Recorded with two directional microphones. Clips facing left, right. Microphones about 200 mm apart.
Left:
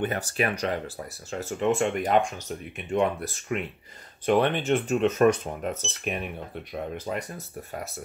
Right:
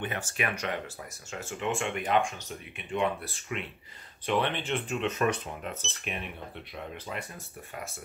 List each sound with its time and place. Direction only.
0.0 s speech: 40° left (ahead or behind)